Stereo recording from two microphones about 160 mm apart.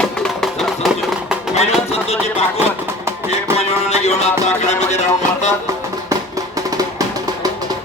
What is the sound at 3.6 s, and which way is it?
Speech, 40° left (ahead or behind).